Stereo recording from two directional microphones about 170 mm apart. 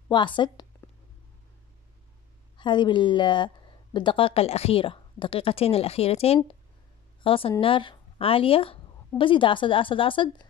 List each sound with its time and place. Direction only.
0.1 s a woman's voice: 25° left (ahead or behind)
2.5 s a woman's voice: 25° left (ahead or behind)